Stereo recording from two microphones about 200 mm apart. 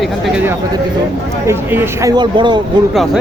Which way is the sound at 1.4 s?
10° right (ahead or behind).